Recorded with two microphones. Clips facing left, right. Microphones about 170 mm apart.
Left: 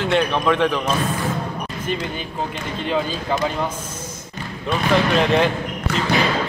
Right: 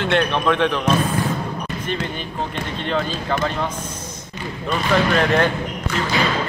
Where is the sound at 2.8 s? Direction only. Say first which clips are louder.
Left 1 dB; 10° left (ahead or behind).